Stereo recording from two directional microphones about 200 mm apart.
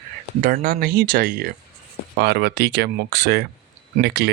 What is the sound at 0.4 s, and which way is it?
Speech, 45° right (ahead or behind).